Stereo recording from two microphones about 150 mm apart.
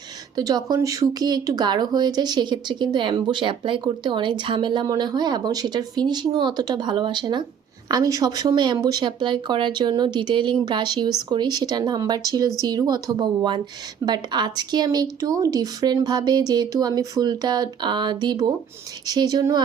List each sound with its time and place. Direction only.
0.3 s speech: 25° right (ahead or behind)